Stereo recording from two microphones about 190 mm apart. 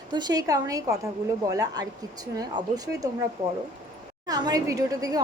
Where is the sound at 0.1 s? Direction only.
20° right (ahead or behind).